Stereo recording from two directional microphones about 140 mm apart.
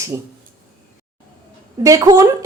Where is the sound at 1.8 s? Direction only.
25° right (ahead or behind).